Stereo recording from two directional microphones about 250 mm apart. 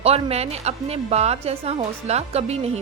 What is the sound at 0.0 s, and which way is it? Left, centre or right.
A woman's voice, right.